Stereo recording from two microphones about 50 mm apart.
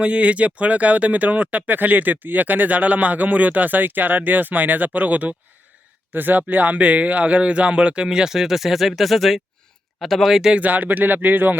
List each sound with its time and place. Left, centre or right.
0.0 s speech: right; by 10.5 s centre
10.5 s speech: right